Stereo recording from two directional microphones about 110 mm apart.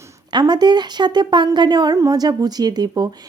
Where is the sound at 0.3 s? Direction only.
40° right (ahead or behind).